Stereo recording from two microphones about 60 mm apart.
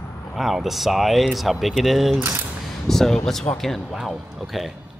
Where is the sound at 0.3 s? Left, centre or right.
Centre.